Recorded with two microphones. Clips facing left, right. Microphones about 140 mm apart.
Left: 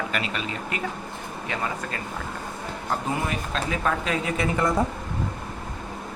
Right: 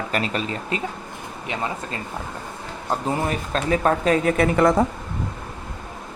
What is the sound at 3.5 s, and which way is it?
Speech, 40° right (ahead or behind).